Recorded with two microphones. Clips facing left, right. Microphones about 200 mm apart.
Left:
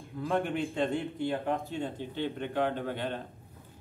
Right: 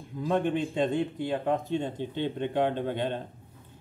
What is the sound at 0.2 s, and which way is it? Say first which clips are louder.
Speech: right 3 dB; 20° right (ahead or behind).